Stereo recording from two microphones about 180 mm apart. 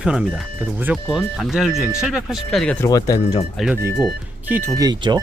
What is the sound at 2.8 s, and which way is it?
Speech, 20° left (ahead or behind).